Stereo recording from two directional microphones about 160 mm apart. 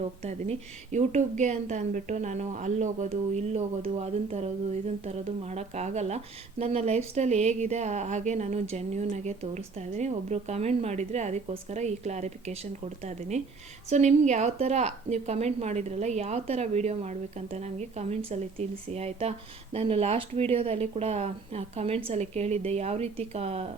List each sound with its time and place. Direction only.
0.2 s a woman's voice: 45° right (ahead or behind)